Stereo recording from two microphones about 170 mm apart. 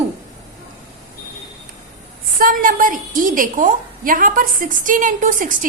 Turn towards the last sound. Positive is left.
turn(degrees=-50)  # may be behind; listen again after turning